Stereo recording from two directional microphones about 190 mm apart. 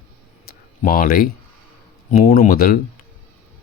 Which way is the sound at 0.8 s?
50° left (ahead or behind).